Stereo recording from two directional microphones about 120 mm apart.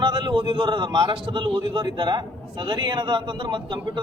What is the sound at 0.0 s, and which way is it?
A man's voice, 40° right (ahead or behind).